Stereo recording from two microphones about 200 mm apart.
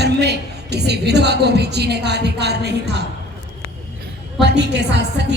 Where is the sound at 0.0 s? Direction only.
55° right (ahead or behind).